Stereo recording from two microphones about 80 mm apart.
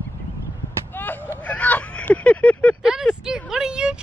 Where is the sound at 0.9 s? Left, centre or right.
Left.